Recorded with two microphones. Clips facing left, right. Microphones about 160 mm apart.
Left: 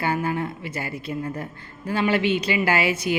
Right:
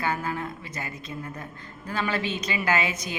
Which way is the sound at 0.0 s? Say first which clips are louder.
Left 4 dB; 30° left (ahead or behind).